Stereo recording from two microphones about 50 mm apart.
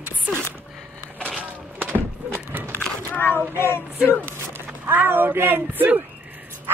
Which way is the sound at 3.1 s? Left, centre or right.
Left.